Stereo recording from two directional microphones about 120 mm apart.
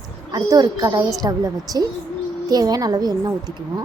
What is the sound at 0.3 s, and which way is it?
A woman's voice, 35° right (ahead or behind).